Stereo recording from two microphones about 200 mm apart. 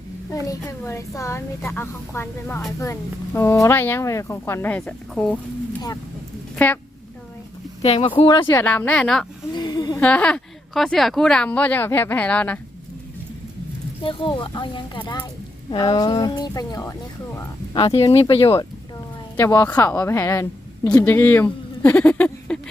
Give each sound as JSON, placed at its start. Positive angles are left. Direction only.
{"t": 0.3, "sound": "a child's voice", "side_deg": 15}
{"t": 6.6, "sound": "a child's voice", "side_deg": 10}
{"t": 7.8, "sound": "speech", "side_deg": 30}
{"t": 8.4, "sound": "a child's voice", "side_deg": 10}
{"t": 9.5, "sound": "a sound", "side_deg": 20}
{"t": 10.0, "sound": "a child's voice", "side_deg": 5}
{"t": 14.0, "sound": "speech", "side_deg": 25}
{"t": 19.4, "sound": "a child's voice", "side_deg": 10}
{"t": 21.4, "sound": "a sound", "side_deg": 10}